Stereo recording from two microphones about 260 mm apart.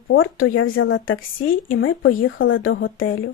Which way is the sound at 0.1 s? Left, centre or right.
Left.